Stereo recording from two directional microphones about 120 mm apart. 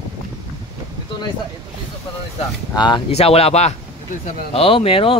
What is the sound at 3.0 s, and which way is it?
Speech, 55° left (ahead or behind).